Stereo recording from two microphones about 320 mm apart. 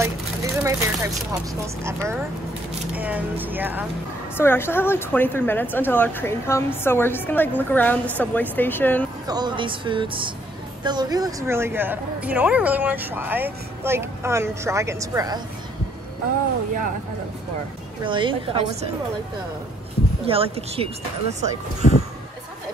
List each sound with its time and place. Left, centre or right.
0.0 s speech: centre
4.4 s a woman's voice: centre
9.3 s speech: centre
18.0 s speech: centre
20.2 s speech: centre